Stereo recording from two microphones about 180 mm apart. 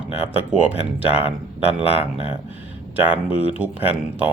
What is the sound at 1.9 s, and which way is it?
Speech, 30° left (ahead or behind).